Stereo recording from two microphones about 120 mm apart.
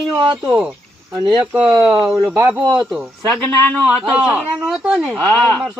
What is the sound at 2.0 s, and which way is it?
Speech, 25° right (ahead or behind).